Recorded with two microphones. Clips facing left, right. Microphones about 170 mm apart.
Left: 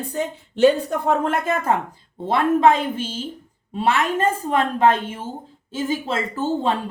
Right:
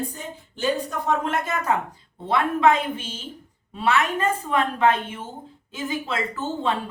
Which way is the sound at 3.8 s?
35° left (ahead or behind).